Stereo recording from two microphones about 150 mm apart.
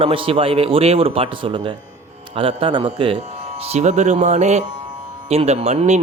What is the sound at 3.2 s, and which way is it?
A man's voice, 45° right (ahead or behind).